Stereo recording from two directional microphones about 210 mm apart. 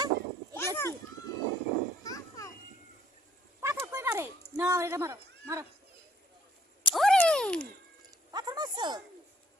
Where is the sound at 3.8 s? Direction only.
15° right (ahead or behind).